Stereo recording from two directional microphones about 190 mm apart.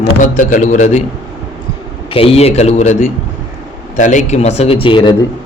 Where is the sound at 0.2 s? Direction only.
40° left (ahead or behind).